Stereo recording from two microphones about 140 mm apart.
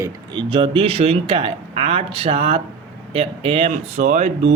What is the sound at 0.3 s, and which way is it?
Speech, 40° right (ahead or behind).